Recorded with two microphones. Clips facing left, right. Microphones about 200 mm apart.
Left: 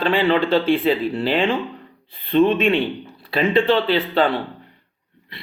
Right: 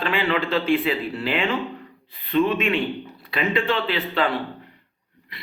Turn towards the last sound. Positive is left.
turn(degrees=30)  # may be behind; listen again after turning